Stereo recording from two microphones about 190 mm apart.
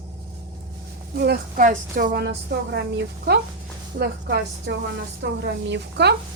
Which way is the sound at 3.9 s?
60° right (ahead or behind).